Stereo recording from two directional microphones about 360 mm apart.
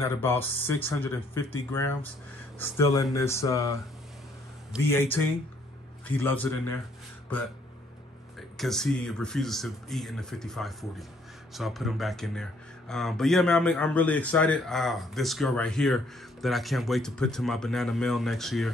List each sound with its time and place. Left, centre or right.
0.0 s speech: centre
8.4 s speech: centre